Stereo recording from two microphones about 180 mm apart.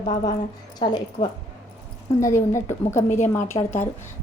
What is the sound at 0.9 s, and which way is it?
A woman's voice, 25° left (ahead or behind).